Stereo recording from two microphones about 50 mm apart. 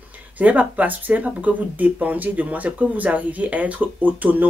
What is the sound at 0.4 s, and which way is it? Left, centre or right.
Speech, right.